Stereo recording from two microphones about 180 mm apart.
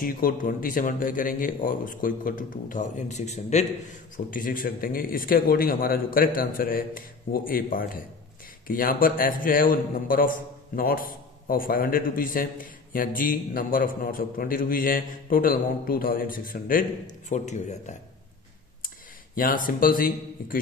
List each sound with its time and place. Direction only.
0.0 s a man's voice: 50° left (ahead or behind)
4.3 s a man's voice: 50° left (ahead or behind)
19.3 s a man's voice: 50° left (ahead or behind)